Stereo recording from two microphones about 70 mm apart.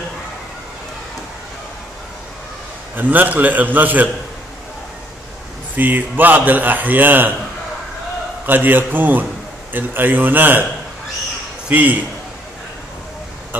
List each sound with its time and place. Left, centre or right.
3.0 s a man's voice: right
5.8 s a man's voice: right
8.5 s a man's voice: right
11.7 s a man's voice: right